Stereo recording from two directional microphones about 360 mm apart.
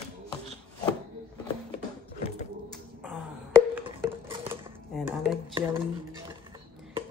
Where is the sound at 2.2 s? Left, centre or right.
Centre.